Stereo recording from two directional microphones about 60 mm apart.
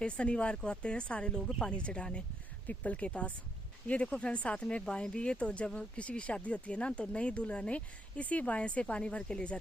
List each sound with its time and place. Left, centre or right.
0.0 s speech: centre